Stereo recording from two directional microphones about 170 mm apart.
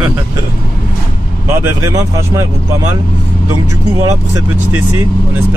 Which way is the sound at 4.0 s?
15° right (ahead or behind).